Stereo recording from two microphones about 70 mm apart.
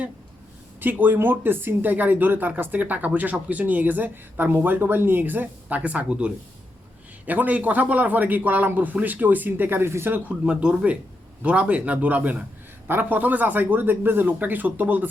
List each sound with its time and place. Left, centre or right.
0.8 s speech: right
10.2 s speech: centre